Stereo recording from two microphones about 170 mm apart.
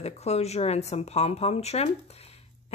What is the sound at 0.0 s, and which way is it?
Speech, 40° left (ahead or behind).